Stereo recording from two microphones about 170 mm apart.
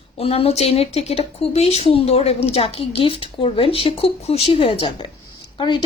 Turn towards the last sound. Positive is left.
turn(degrees=25)  # may be behind; listen again after turning